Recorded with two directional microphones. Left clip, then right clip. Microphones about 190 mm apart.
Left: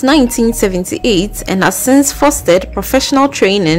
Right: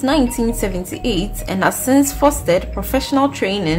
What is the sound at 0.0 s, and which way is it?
A woman's voice, 45° left (ahead or behind).